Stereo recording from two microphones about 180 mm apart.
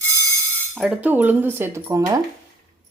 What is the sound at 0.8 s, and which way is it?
Cutlery, 5° right (ahead or behind).